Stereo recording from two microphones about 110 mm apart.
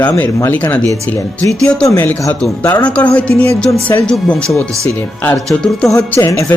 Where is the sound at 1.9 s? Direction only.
15° left (ahead or behind).